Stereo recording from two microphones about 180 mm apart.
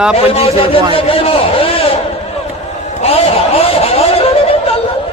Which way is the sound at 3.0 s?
35° left (ahead or behind).